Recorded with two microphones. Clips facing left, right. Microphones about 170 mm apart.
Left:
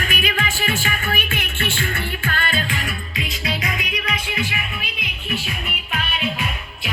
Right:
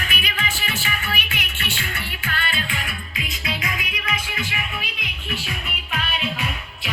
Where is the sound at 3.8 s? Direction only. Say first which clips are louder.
Left 3 dB; 25° right (ahead or behind).